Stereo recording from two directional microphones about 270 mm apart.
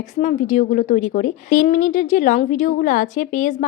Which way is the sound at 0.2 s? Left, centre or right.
Left.